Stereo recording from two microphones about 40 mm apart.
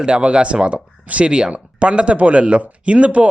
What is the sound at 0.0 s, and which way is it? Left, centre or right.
Speech, right.